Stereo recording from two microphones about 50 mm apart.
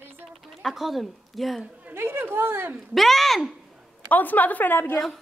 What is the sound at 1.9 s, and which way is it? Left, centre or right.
Speech, right.